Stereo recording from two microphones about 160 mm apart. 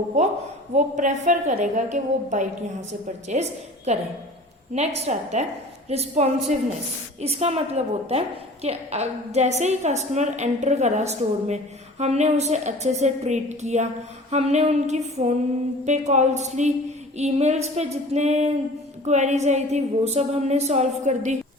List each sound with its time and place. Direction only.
0.8 s a woman's voice: 50° right (ahead or behind)